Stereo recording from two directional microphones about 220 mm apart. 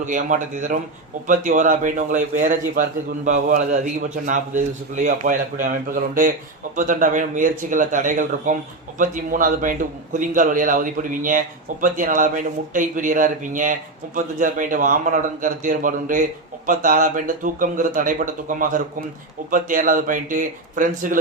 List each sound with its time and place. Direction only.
0.0 s a man's voice: 35° right (ahead or behind)